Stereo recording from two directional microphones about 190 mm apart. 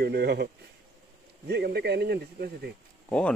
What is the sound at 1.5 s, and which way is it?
Speech, 60° right (ahead or behind).